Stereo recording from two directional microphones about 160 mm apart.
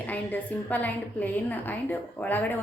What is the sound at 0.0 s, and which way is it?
A woman's voice, 10° left (ahead or behind).